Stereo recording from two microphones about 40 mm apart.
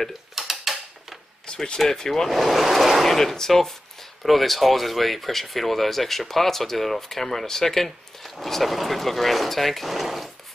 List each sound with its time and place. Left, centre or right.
0.4 s mechanisms: centre
1.5 s speech: left; by 10.3 s centre